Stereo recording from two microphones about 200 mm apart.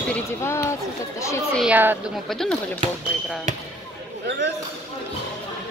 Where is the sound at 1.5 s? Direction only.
5° right (ahead or behind).